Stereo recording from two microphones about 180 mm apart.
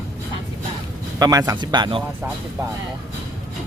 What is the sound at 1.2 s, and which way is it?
Speech, 20° right (ahead or behind).